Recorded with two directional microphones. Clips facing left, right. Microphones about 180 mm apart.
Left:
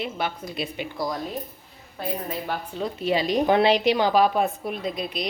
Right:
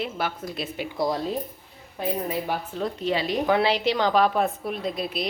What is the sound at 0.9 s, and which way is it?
Speech, 25° right (ahead or behind).